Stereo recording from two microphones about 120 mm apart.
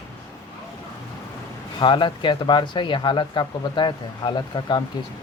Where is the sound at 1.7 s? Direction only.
40° left (ahead or behind).